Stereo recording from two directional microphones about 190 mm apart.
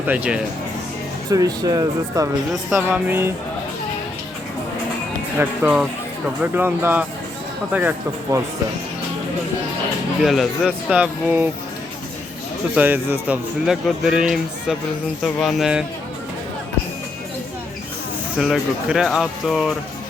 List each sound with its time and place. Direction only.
0.1 s speech: 5° right (ahead or behind)
1.3 s speech: 20° right (ahead or behind)
2.5 s a man's voice: centre (ahead or behind)
5.4 s a man's voice: 5° right (ahead or behind)
10.2 s a man's voice: centre (ahead or behind)
12.7 s a man's voice: 10° right (ahead or behind)
18.3 s a man's voice: centre (ahead or behind)